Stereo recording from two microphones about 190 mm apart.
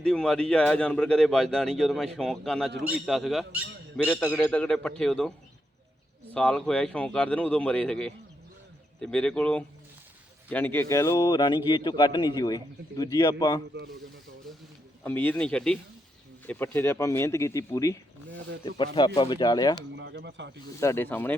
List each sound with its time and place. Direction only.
0.0 s speech: 5° left (ahead or behind)
4.3 s speech: 5° left (ahead or behind)
6.3 s a man's voice: 5° left (ahead or behind); by 13.6 s 20° left (ahead or behind)
15.0 s speech: 10° left (ahead or behind)
18.9 s a man's voice: 25° left (ahead or behind)
20.0 s speech: 65° right (ahead or behind)
20.7 s speech: 15° left (ahead or behind)